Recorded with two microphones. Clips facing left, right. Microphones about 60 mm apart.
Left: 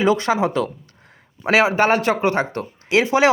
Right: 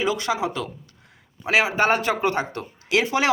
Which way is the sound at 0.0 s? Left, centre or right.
Left.